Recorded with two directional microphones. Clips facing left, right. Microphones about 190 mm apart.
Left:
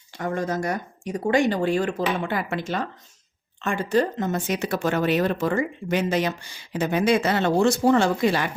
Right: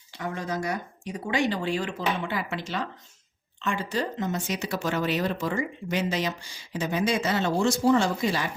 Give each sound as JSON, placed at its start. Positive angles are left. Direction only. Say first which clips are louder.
{"t": 0.2, "sound": "speech", "louder": "left 5 dB", "side_deg": 45}